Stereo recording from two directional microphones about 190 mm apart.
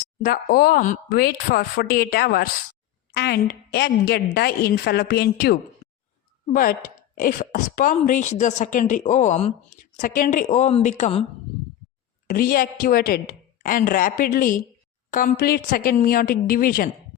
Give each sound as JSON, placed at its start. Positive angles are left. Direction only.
{"t": 0.0, "sound": "a woman's voice", "side_deg": 45}
{"t": 5.8, "sound": "a sound", "side_deg": 35}
{"t": 6.4, "sound": "a woman's voice", "side_deg": 45}
{"t": 12.3, "sound": "speech", "side_deg": 50}